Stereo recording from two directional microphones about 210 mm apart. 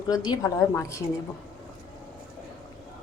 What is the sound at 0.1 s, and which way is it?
Speech, 20° left (ahead or behind).